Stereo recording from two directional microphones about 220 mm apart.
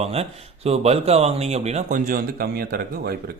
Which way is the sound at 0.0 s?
30° right (ahead or behind).